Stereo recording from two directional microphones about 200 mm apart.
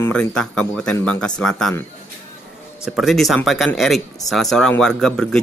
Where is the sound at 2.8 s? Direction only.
Centre (ahead or behind).